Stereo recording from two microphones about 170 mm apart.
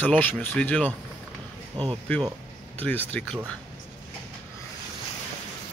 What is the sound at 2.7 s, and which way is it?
Speech, 10° left (ahead or behind).